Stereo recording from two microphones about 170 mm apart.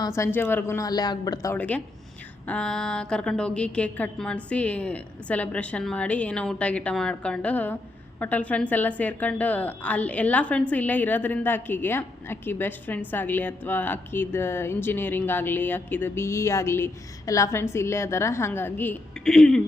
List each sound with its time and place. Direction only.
0.2 s speech: 10° left (ahead or behind)
1.5 s a woman's voice: 10° left (ahead or behind)